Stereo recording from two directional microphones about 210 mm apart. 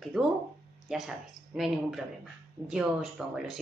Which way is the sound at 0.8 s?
Centre (ahead or behind).